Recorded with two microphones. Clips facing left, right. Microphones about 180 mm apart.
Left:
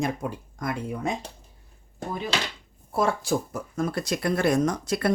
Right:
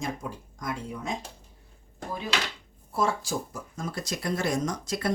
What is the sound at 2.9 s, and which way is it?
Speech, 60° left (ahead or behind).